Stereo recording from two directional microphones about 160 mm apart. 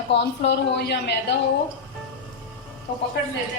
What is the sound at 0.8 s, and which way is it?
Speech, 90° left.